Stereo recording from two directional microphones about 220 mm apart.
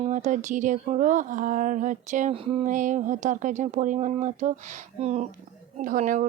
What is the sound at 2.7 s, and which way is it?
Speech, 35° right (ahead or behind).